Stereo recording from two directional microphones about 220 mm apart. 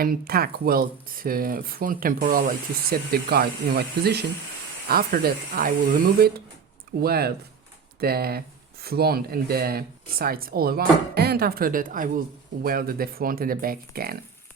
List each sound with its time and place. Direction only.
0.0 s speech: 45° right (ahead or behind)